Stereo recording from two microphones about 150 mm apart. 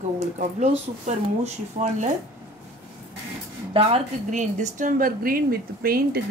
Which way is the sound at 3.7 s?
45° right (ahead or behind).